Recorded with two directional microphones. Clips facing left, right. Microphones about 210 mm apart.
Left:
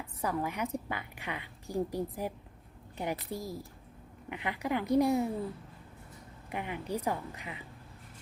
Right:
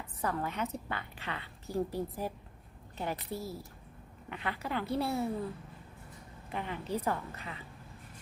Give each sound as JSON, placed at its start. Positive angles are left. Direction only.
{"t": 0.2, "sound": "a woman's voice", "side_deg": 10}
{"t": 6.5, "sound": "a woman's voice", "side_deg": 15}